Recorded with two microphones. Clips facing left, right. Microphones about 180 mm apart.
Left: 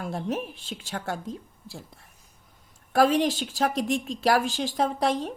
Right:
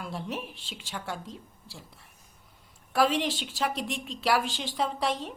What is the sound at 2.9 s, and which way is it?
A woman's voice, 40° left (ahead or behind).